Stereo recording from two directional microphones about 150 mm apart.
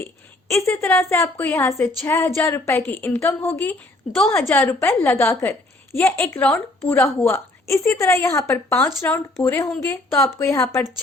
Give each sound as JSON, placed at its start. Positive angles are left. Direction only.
{"t": 0.6, "sound": "a woman's voice", "side_deg": 15}